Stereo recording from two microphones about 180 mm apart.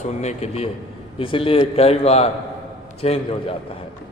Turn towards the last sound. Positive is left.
turn(degrees=35)  # may be behind; listen again after turning